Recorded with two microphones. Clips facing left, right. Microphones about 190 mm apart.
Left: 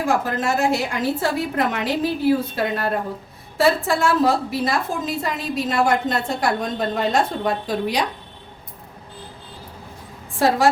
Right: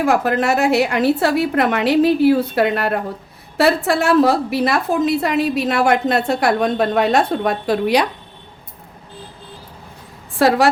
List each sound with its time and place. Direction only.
0.0 s a woman's voice: 65° right (ahead or behind)
10.3 s a woman's voice: 70° right (ahead or behind)